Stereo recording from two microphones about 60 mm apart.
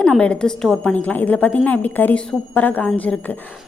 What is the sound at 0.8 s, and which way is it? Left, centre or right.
A woman's voice, left.